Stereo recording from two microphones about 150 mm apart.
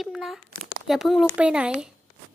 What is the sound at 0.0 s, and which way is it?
Speech, centre (ahead or behind).